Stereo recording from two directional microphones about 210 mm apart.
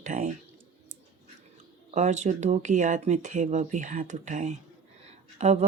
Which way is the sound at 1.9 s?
35° right (ahead or behind).